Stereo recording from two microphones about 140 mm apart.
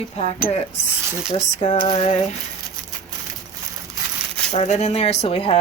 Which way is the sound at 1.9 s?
50° left (ahead or behind).